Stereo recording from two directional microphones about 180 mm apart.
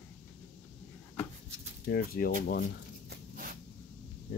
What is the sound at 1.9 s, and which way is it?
Speech, 55° left (ahead or behind).